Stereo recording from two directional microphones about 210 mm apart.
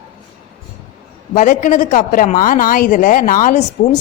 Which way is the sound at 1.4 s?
35° left (ahead or behind).